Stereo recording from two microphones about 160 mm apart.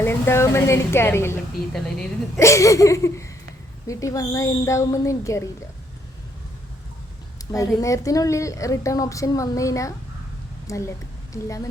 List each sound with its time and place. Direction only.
0.0 s a woman's voice: 15° left (ahead or behind)
1.7 s a woman's voice: 5° left (ahead or behind)
2.4 s a woman's voice: 20° left (ahead or behind)
7.5 s a woman's voice: 20° left (ahead or behind)